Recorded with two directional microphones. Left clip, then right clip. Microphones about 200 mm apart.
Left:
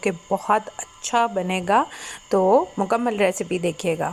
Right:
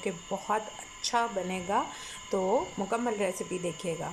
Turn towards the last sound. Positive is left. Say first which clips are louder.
# left 11 dB
turn(degrees=15)  # may be behind; listen again after turning